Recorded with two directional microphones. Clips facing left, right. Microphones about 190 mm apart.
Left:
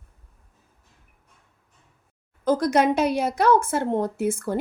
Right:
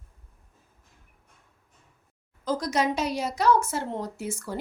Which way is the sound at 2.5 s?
55° left (ahead or behind).